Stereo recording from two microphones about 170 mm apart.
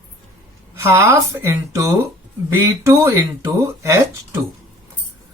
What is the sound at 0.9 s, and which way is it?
Speech, 15° right (ahead or behind).